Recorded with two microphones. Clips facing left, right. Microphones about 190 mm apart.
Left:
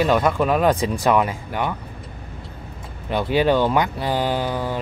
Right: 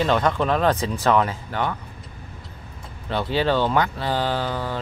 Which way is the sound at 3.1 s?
15° left (ahead or behind).